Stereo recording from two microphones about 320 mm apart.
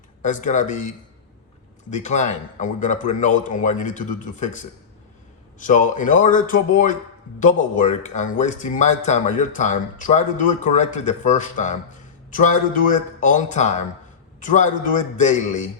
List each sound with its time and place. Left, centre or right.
0.2 s speech: left